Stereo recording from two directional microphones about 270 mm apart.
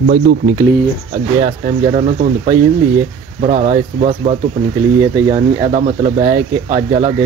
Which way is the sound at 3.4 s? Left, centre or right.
Right.